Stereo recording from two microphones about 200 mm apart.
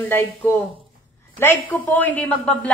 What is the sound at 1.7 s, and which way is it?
A woman's voice, 10° left (ahead or behind).